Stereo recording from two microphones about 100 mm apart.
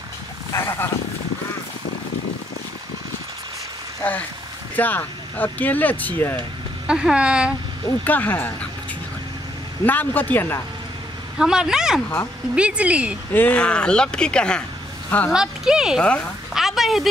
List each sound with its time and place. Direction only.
0.5 s a sound: 25° left (ahead or behind)
4.0 s speech: 15° left (ahead or behind)
6.9 s a woman's voice: 10° right (ahead or behind)
8.0 s speech: 15° left (ahead or behind)
9.8 s speech: 20° left (ahead or behind)
11.3 s a woman's voice: 5° right (ahead or behind)
13.3 s speech: 15° left (ahead or behind)
15.3 s a woman's voice: 5° right (ahead or behind)
16.0 s speech: 10° left (ahead or behind)
16.5 s a sound: centre (ahead or behind)